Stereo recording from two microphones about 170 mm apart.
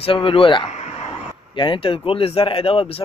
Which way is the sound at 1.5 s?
30° left (ahead or behind).